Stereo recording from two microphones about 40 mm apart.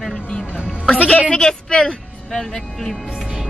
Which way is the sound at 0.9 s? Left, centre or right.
Left.